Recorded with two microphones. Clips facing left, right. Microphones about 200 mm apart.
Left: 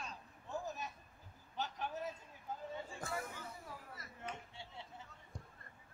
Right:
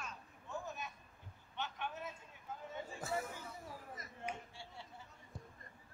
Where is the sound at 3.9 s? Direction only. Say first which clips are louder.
Right 5 dB; 20° right (ahead or behind).